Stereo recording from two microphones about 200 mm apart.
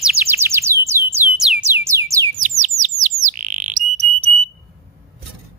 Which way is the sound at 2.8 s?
40° right (ahead or behind).